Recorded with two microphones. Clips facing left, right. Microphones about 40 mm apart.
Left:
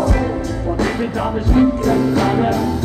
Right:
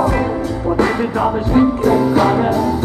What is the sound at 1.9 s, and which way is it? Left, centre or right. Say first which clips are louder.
Music: right 3 dB; centre.